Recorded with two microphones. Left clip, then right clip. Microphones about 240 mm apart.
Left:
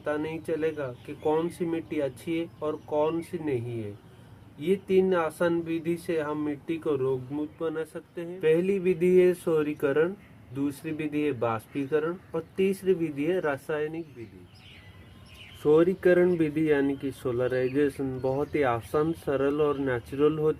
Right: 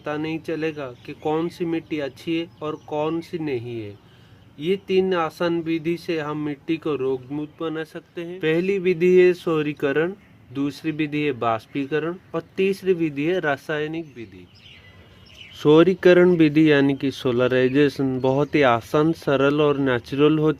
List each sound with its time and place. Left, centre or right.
0.0 s speech: right
4.6 s speech: right
15.6 s speech: right